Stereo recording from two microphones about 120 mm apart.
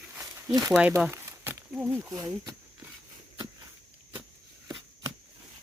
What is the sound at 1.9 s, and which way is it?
Speech, 30° right (ahead or behind).